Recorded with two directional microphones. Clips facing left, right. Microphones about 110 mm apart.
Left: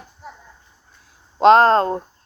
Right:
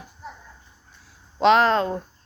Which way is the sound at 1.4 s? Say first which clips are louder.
Left 5 dB; 40° left (ahead or behind).